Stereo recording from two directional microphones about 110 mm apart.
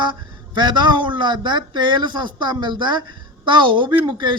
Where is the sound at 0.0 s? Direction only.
45° right (ahead or behind).